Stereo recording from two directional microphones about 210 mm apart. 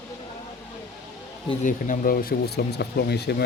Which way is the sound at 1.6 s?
40° left (ahead or behind).